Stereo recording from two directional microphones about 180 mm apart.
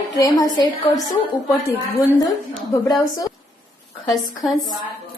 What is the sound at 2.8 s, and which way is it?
Speech, 20° left (ahead or behind).